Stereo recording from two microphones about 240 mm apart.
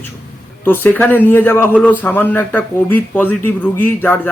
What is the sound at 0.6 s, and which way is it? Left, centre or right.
A man's voice, centre.